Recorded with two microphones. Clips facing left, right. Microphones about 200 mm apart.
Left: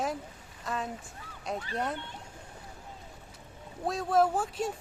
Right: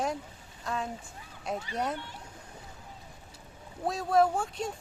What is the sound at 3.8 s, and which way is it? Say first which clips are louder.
Speech: right 1 dB; centre (ahead or behind).